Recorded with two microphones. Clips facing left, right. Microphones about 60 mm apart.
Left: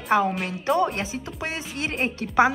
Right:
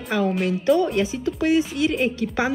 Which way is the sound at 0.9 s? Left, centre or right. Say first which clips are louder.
Right 8 dB; left.